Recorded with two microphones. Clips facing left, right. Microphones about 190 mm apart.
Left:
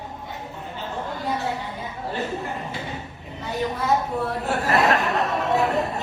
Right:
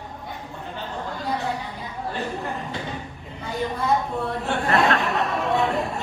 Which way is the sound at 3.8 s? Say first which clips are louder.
Even; centre (ahead or behind).